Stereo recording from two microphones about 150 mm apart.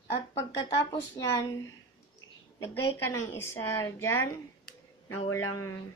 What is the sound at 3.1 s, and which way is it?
A woman's voice, 20° left (ahead or behind).